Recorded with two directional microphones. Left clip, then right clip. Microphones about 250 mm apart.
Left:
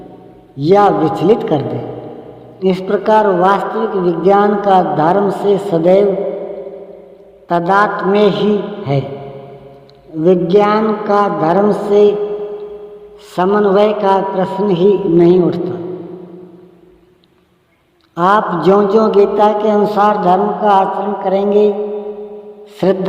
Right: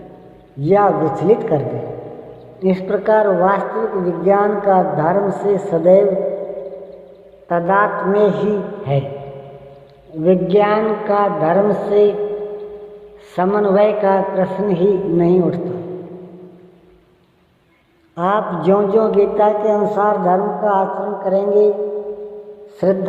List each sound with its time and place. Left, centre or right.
0.6 s a man's voice: left
7.4 s a man's voice: left
10.2 s a man's voice: left
13.3 s a man's voice: left
18.1 s a man's voice: left
22.8 s a man's voice: left